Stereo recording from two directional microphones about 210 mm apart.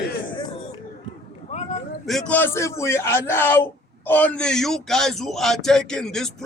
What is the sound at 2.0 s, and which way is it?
A man's voice, centre (ahead or behind).